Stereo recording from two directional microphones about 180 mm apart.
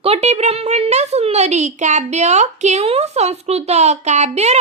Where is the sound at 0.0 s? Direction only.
35° right (ahead or behind).